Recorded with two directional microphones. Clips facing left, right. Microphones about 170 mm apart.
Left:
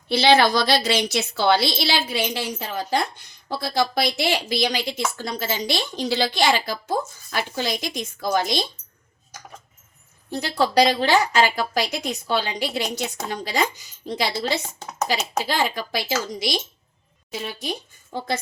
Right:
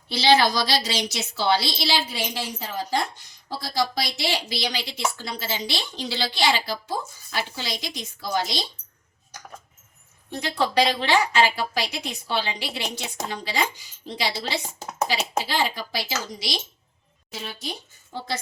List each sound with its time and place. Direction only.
0.1 s a woman's voice: 55° left (ahead or behind)
10.3 s a woman's voice: 35° left (ahead or behind); by 16.6 s 50° left (ahead or behind)